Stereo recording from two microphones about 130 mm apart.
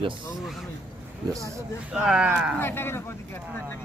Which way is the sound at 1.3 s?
25° right (ahead or behind).